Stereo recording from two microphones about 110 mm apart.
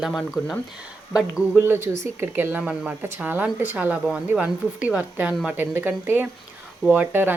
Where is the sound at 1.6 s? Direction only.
20° right (ahead or behind).